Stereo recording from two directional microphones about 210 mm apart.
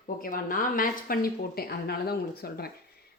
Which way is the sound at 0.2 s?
40° left (ahead or behind).